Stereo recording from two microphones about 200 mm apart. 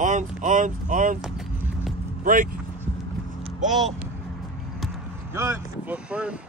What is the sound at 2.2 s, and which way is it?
Speech, 40° right (ahead or behind).